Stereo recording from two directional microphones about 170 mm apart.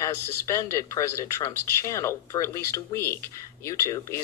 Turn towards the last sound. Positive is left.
turn(degrees=20)  # may be behind; listen again after turning